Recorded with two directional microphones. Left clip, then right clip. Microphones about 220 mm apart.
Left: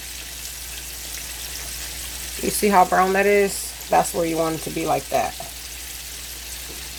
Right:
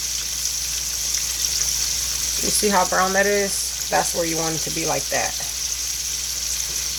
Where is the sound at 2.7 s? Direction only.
40° left (ahead or behind).